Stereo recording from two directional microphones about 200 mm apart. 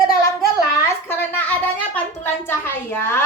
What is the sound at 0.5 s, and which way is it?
A child's voice, 15° left (ahead or behind).